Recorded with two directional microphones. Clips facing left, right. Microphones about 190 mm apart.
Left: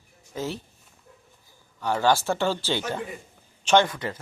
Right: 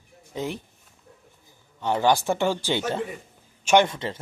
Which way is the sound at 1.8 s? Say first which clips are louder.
Right 1 dB; 20° right (ahead or behind).